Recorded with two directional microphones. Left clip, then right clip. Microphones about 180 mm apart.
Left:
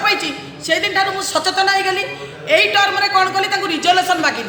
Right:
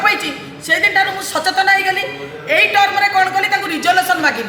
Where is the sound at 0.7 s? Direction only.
15° left (ahead or behind).